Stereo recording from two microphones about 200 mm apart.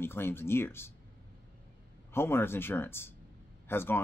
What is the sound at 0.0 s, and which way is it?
Speech, 10° left (ahead or behind).